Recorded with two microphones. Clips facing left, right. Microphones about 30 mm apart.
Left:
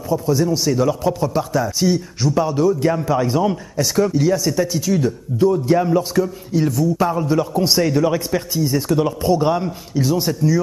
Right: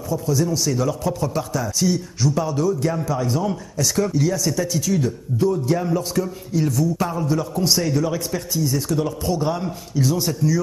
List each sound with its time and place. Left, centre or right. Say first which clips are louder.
0.1 s a man's voice: left 4 dB; left